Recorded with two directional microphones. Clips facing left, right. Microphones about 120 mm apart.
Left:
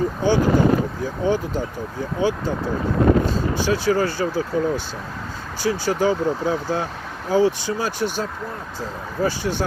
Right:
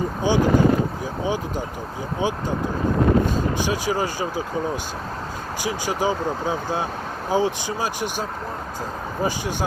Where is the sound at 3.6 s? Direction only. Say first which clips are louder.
Left 3 dB; 15° right (ahead or behind).